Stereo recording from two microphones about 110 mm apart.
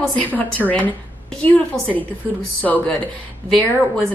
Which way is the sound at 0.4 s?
15° left (ahead or behind).